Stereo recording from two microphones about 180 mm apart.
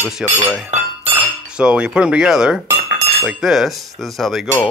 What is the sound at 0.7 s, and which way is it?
Chink, 35° right (ahead or behind).